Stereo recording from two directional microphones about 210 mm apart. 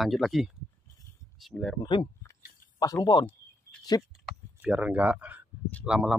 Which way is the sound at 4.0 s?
Centre (ahead or behind).